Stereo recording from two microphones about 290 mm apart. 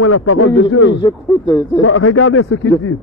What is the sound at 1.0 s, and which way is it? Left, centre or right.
Speech, centre.